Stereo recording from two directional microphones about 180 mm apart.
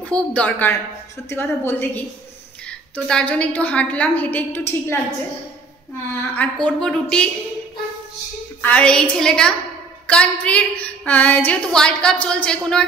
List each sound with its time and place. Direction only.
0.0 s a woman's voice: 5° left (ahead or behind)
3.1 s a woman's voice: 5° left (ahead or behind)
6.3 s a woman's voice: 5° left (ahead or behind)
8.5 s a woman's voice: 10° left (ahead or behind)